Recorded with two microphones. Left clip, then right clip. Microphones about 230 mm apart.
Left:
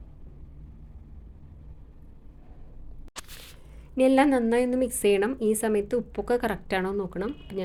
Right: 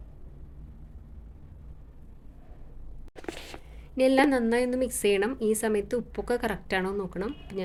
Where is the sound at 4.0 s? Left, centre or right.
Centre.